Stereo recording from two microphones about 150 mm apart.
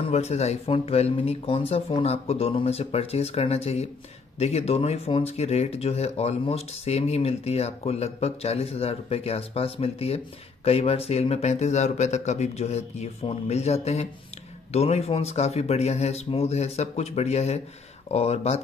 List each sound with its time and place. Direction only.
0.1 s speech: 45° left (ahead or behind)